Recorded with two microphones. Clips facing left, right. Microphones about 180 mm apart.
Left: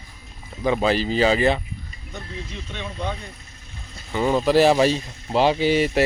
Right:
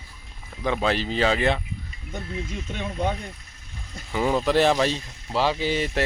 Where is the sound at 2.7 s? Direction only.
45° right (ahead or behind).